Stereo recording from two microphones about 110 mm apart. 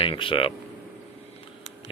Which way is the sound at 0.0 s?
55° left (ahead or behind).